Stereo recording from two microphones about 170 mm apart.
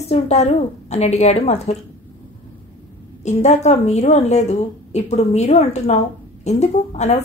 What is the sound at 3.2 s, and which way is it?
Speech, 40° left (ahead or behind).